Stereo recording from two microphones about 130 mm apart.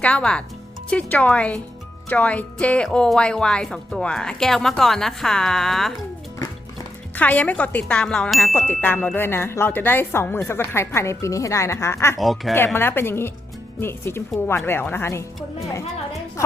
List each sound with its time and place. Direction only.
0.0 s speech: 10° left (ahead or behind)
7.2 s speech: 10° left (ahead or behind)
8.5 s speech: 15° left (ahead or behind)
12.2 s speech: centre (ahead or behind)
12.5 s speech: 15° left (ahead or behind)